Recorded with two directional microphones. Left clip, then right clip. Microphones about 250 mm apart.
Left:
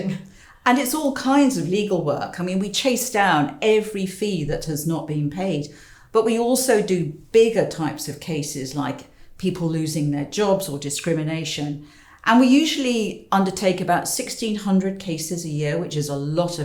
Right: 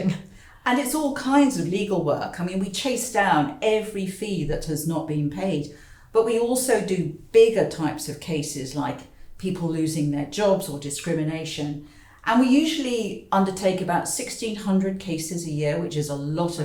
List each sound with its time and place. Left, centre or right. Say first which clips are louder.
0.6 s speech: left 4 dB; left